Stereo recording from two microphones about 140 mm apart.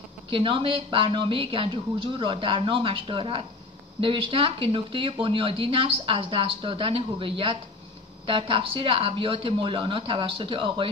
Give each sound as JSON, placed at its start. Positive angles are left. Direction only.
{"t": 0.3, "sound": "a woman's voice", "side_deg": -40}